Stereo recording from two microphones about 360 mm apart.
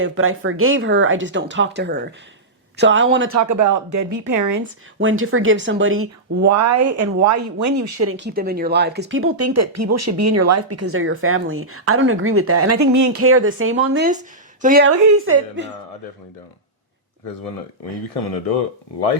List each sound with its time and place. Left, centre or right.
0.0 s speech: right
3.4 s speech: right
4.9 s speech: right
8.1 s speech: right
13.2 s speech: right